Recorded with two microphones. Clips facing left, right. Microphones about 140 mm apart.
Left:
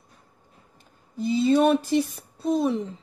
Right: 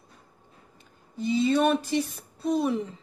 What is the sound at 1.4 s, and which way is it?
A woman's voice, centre (ahead or behind).